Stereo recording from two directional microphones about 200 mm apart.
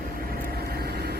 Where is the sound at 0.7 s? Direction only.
50° right (ahead or behind).